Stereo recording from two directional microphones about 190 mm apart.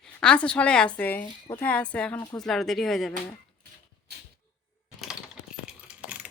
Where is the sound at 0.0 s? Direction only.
5° left (ahead or behind).